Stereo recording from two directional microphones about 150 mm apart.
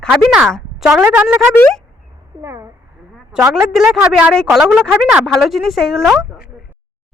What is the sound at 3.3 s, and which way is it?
Speech, 5° right (ahead or behind).